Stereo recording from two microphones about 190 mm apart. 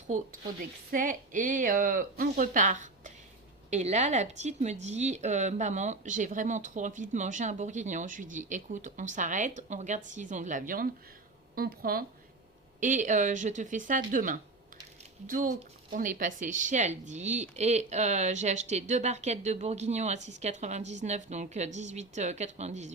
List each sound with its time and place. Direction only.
0.1 s a woman's voice: 40° right (ahead or behind)
12.8 s speech: 40° right (ahead or behind)